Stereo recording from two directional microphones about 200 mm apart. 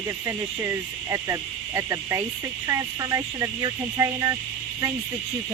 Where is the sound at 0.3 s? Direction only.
15° right (ahead or behind).